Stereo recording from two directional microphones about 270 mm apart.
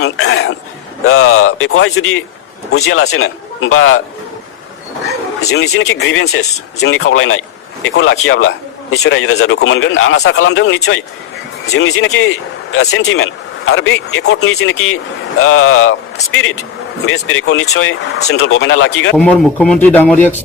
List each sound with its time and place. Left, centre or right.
0.0 s a sound: left
1.0 s a man's voice: left
5.5 s a man's voice: left
19.1 s a man's voice: centre